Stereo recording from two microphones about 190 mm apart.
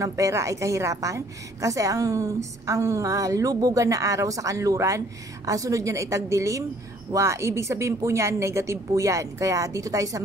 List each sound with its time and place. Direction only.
0.0 s a woman's voice: 15° right (ahead or behind)